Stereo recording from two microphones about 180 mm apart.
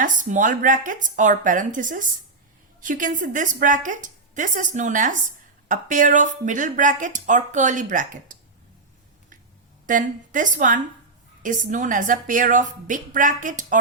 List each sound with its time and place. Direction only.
0.0 s speech: 45° right (ahead or behind)
9.8 s speech: 45° right (ahead or behind)